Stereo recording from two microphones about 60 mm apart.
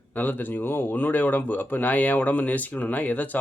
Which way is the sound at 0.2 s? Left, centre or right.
Left.